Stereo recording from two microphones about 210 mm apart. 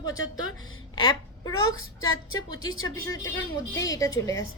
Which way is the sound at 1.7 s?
75° left (ahead or behind).